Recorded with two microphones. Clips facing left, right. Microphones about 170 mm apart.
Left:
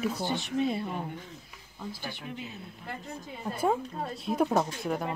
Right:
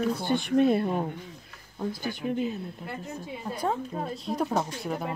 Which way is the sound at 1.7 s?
45° right (ahead or behind).